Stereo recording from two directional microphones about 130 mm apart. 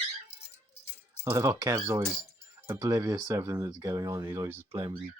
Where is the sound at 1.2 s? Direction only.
25° right (ahead or behind).